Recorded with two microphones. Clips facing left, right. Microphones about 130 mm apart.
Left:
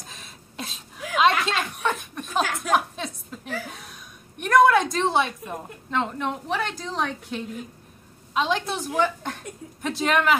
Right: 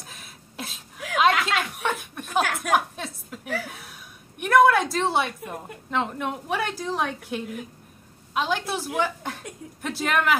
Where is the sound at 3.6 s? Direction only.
5° right (ahead or behind).